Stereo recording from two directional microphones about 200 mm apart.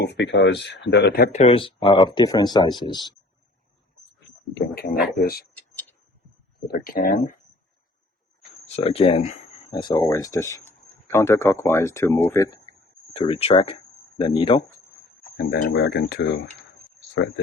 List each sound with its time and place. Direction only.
0.0 s speech: 60° left (ahead or behind)
1.4 s speech: 30° left (ahead or behind)
4.5 s speech: 50° left (ahead or behind)
6.7 s speech: 45° left (ahead or behind)
8.6 s speech: 30° left (ahead or behind)
9.7 s speech: 20° left (ahead or behind)
13.1 s speech: 25° left (ahead or behind)
15.4 s speech: 55° left (ahead or behind)